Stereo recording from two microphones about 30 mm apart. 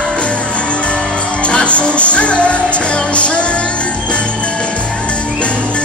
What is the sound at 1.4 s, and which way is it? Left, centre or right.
Music, left.